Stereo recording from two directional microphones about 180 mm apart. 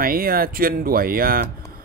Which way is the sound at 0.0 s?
55° right (ahead or behind).